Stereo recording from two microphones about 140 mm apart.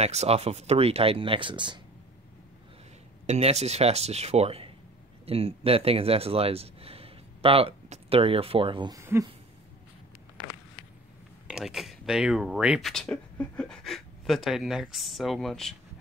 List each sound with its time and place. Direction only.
0.0 s speech: 50° right (ahead or behind); by 1.8 s 35° right (ahead or behind)
3.3 s speech: 50° right (ahead or behind)
8.9 s speech: 20° right (ahead or behind)
11.4 s speech: 5° right (ahead or behind)